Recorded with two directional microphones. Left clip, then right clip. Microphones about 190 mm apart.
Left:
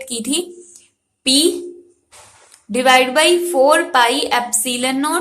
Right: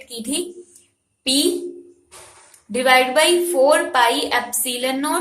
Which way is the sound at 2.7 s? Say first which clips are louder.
Left 3 dB; 25° left (ahead or behind).